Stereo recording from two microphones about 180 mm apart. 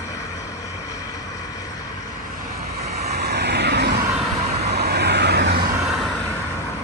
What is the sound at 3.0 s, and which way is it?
Vehicle, 65° right (ahead or behind).